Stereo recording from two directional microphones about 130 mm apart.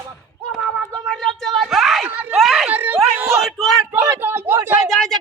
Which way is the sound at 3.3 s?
Centre (ahead or behind).